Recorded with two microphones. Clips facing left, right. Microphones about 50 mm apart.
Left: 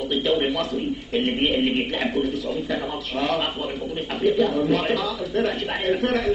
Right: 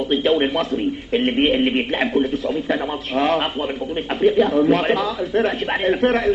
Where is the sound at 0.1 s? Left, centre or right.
Right.